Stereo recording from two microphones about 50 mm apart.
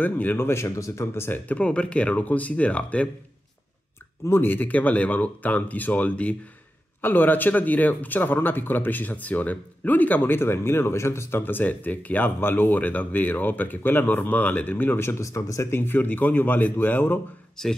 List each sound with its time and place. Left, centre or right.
0.0 s speech: left
0.4 s speech: left
1.6 s speech: left
4.4 s speech: left
7.0 s speech: left
15.0 s speech: left
15.7 s speech: left
17.6 s speech: centre